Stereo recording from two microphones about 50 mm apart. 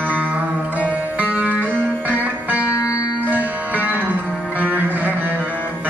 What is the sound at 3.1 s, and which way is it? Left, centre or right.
Music, right.